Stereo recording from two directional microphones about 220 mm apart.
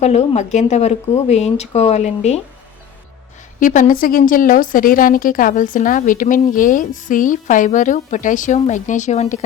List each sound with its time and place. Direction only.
0.0 s speech: 30° left (ahead or behind)
3.6 s a woman's voice: 35° left (ahead or behind)